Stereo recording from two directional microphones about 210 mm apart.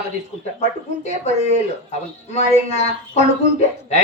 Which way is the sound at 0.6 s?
30° left (ahead or behind).